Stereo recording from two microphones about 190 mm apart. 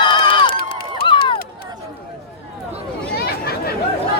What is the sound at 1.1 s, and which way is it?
Run, 25° left (ahead or behind).